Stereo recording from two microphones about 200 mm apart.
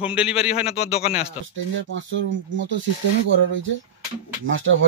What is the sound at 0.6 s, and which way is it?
Speech, 30° left (ahead or behind).